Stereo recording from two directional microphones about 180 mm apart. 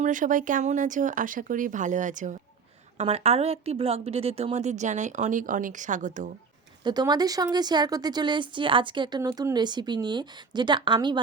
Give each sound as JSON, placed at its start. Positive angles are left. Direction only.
{"t": 0.0, "sound": "a woman's voice", "side_deg": -45}
{"t": 6.8, "sound": "speech", "side_deg": -20}